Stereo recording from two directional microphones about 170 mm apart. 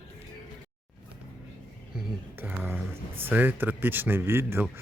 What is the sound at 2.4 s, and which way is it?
Speech, 10° right (ahead or behind).